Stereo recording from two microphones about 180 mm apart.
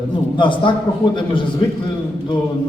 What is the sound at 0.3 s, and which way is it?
A man's voice, 25° left (ahead or behind).